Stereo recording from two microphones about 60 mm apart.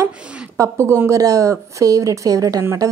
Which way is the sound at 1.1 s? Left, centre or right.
Right.